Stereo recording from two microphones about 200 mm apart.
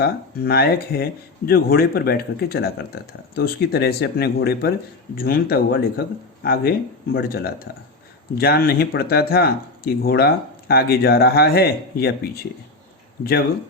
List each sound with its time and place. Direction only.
0.0 s speech: 50° left (ahead or behind)